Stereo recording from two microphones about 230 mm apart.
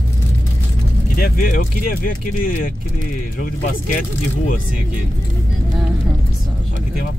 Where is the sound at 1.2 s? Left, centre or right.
Left.